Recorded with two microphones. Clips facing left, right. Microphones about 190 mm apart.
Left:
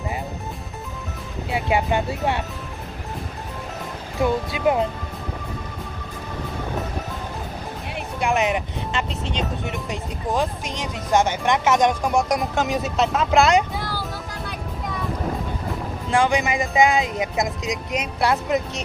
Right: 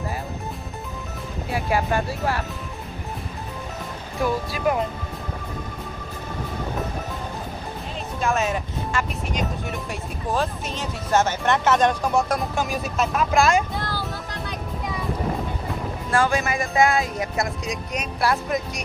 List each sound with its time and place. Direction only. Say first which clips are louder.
1.5 s speech: left 2 dB; 20° left (ahead or behind)
4.2 s speech: left 2 dB; 20° left (ahead or behind)
8.2 s speech: left 2 dB; 15° left (ahead or behind)
16.1 s speech: left 2 dB; 15° left (ahead or behind)